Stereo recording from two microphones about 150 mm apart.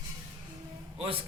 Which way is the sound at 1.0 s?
35° right (ahead or behind).